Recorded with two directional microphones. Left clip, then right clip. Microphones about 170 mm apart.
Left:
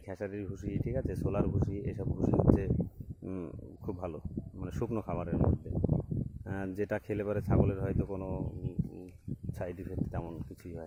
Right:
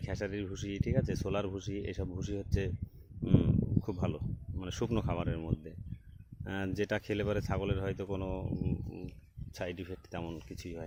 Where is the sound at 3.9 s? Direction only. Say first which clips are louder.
Right 1 dB; 15° right (ahead or behind).